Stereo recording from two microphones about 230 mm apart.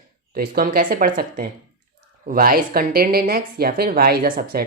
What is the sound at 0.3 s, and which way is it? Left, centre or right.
Speech, right.